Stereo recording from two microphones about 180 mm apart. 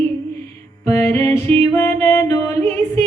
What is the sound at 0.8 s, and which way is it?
Music, 15° left (ahead or behind).